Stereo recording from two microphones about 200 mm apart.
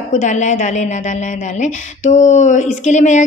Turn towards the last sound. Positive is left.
turn(degrees=35)  # may be behind; listen again after turning